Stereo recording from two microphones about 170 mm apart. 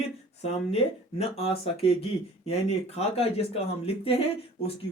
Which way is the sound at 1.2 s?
35° left (ahead or behind).